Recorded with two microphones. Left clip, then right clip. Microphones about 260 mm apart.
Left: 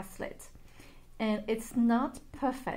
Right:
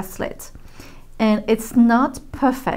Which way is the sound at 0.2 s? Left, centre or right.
Right.